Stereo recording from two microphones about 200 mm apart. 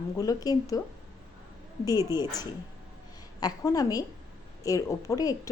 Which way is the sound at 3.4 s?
20° left (ahead or behind).